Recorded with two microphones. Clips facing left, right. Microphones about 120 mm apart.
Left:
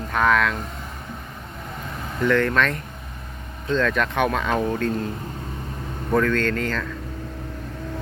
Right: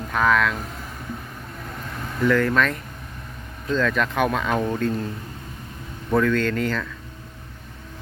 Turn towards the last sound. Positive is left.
turn(degrees=-5)  # may be behind; listen again after turning